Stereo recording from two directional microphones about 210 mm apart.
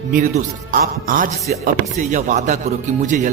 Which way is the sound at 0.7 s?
40° right (ahead or behind).